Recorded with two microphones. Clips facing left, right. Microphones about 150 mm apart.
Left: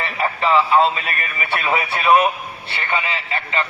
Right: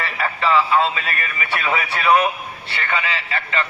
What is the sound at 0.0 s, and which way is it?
A man's voice, 30° left (ahead or behind).